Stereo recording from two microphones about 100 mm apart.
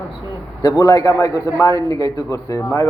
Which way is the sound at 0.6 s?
35° left (ahead or behind).